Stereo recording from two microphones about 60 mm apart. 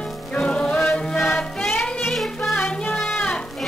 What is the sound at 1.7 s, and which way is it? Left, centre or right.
Music, left.